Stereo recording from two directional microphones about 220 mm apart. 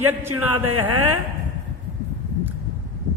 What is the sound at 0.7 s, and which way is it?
Speech, 90° right.